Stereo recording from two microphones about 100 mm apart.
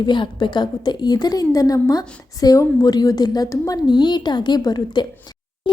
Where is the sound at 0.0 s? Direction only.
50° left (ahead or behind).